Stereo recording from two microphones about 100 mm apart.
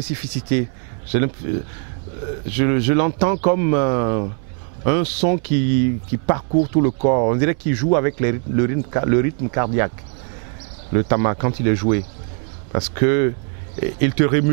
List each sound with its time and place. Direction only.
0.0 s speech: 10° right (ahead or behind)